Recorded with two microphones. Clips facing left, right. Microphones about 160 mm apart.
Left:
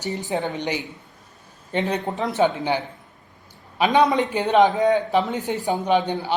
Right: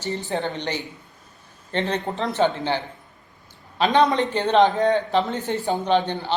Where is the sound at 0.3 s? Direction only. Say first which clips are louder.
Left 3 dB; 15° left (ahead or behind).